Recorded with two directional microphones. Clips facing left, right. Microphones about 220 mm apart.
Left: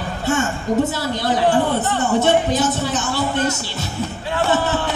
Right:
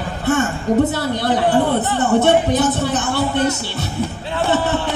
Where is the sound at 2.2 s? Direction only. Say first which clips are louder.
Right 1 dB; 60° right (ahead or behind).